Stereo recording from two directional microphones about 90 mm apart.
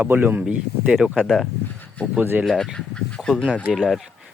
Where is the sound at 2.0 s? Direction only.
15° left (ahead or behind).